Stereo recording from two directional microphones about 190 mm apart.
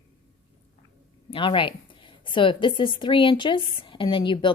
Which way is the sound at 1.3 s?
25° left (ahead or behind).